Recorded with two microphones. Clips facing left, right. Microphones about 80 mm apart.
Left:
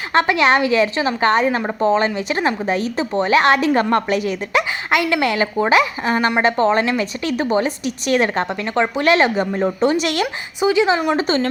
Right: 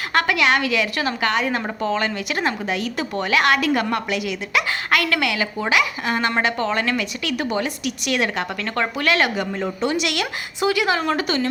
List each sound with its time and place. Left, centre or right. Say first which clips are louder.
0.1 s a woman's voice: left 4 dB; left
1.5 s a woman's voice: left 4 dB; left
1.8 s a woman's voice: left 8 dB; left
2.6 s a woman's voice: left 4 dB; left
4.9 s a woman's voice: left 3 dB; centre
5.2 s a woman's voice: left 5 dB; left
6.1 s a woman's voice: left 4 dB; centre
6.4 s a woman's voice: left 6 dB; left
8.6 s a woman's voice: left 5 dB; left
10.6 s a woman's voice: left 4 dB; centre
11.2 s a woman's voice: left 4 dB; left